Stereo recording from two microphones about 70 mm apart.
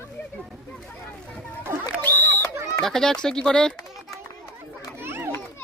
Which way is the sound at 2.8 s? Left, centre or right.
Centre.